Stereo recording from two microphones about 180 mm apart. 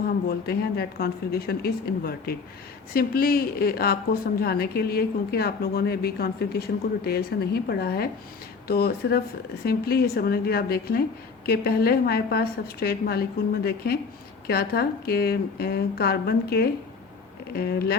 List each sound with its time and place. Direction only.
0.3 s a woman's voice: 60° left (ahead or behind)